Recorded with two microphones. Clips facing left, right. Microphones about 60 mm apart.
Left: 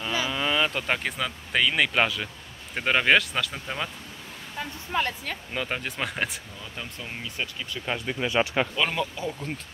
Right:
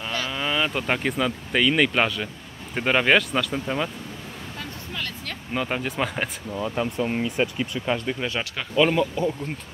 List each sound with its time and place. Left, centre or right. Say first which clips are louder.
0.3 s speech: right 1 dB; centre
4.6 s a sound: left 7 dB; left
5.5 s speech: right 6 dB; centre
6.7 s speech: right 11 dB; right
7.8 s speech: right 1 dB; centre
8.3 s speech: left 6 dB; centre
8.7 s speech: right 7 dB; centre